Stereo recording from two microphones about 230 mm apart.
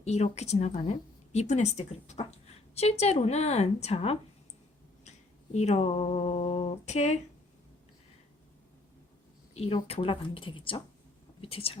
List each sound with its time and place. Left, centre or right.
0.0 s a woman's voice: left
5.5 s a woman's voice: left
9.6 s a woman's voice: left